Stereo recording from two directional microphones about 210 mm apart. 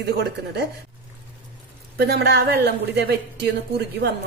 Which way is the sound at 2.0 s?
50° right (ahead or behind).